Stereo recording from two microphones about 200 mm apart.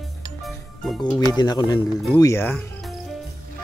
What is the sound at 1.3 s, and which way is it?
Speech, 20° left (ahead or behind).